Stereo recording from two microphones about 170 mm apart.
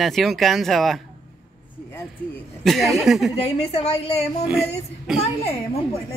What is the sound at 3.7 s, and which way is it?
Speech, 35° left (ahead or behind).